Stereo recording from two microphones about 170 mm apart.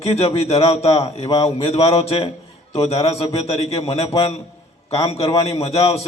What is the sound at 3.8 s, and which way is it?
A man's voice, 40° left (ahead or behind).